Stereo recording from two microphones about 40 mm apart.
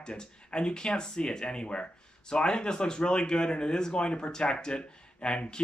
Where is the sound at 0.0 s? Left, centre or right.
Left.